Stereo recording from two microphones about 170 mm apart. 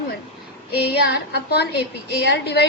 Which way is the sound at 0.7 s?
65° left (ahead or behind).